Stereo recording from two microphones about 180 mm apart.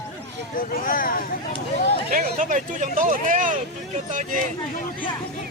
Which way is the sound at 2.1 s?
45° right (ahead or behind).